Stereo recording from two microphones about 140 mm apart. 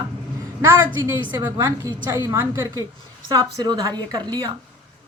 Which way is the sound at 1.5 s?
25° right (ahead or behind).